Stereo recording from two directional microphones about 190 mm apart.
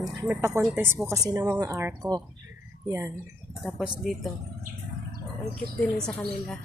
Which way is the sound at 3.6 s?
Centre (ahead or behind).